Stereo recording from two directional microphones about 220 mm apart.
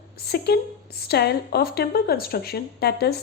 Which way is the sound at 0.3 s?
45° left (ahead or behind).